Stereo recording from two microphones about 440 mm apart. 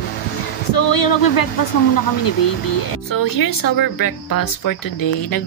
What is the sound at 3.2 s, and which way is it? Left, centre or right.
Speech, left.